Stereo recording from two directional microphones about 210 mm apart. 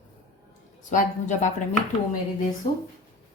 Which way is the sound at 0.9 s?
35° left (ahead or behind).